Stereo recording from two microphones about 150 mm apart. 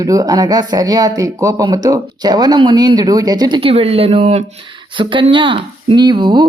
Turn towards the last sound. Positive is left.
turn(degrees=-30)  # may be behind; listen again after turning